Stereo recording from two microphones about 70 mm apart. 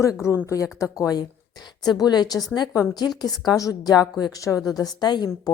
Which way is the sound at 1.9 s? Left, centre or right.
Left.